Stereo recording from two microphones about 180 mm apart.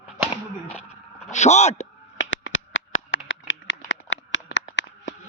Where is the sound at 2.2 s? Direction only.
90° left.